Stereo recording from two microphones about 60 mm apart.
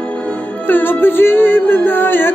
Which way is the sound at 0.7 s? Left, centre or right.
Left.